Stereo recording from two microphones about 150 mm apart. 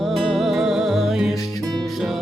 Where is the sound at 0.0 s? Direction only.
Centre (ahead or behind).